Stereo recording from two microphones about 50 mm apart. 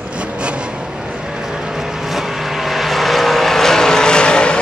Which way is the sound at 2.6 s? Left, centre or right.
Centre.